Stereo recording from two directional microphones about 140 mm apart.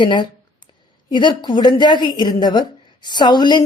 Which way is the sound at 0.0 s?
35° left (ahead or behind).